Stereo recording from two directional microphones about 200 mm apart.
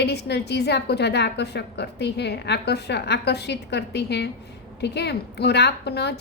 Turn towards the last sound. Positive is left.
turn(degrees=55)  # may be behind; listen again after turning